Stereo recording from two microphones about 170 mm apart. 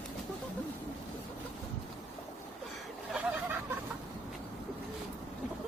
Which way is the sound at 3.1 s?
10° right (ahead or behind).